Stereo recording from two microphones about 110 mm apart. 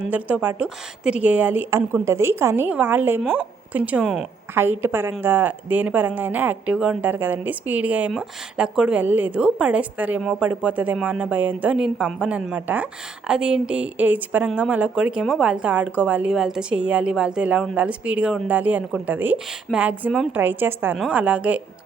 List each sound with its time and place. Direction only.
0.1 s a woman's voice: 15° right (ahead or behind)
4.5 s a woman's voice: 20° right (ahead or behind)